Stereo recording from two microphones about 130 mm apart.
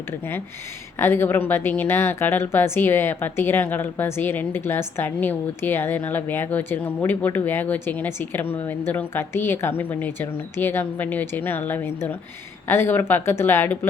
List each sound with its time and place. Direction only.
0.9 s a woman's voice: 20° left (ahead or behind)